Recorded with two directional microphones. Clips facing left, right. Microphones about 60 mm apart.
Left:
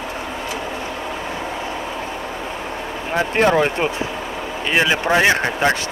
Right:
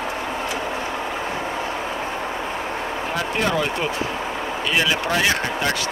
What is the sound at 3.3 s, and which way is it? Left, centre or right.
Speech, left.